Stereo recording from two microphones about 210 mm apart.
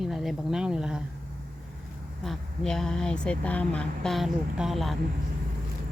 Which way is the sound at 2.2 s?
Centre (ahead or behind).